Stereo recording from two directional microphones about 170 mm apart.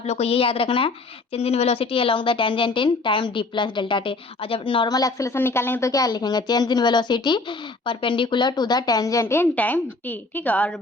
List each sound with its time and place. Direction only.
0.0 s a woman's voice: 40° left (ahead or behind); by 10.8 s 10° left (ahead or behind)